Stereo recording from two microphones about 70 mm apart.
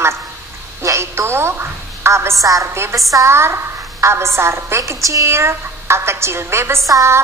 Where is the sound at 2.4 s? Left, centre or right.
Right.